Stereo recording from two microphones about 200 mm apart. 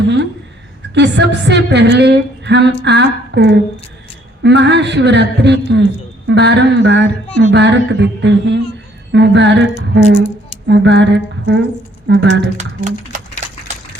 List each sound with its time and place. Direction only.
0.0 s a sound: 60° right (ahead or behind)
0.9 s a man's voice: 60° right (ahead or behind)
10.7 s a man's voice: 60° right (ahead or behind)
12.5 s speech: 35° right (ahead or behind)